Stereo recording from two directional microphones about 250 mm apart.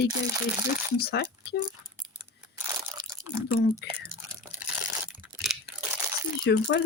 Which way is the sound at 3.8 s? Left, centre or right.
Left.